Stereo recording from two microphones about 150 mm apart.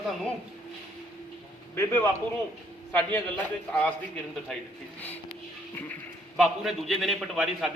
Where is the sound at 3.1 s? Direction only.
10° left (ahead or behind).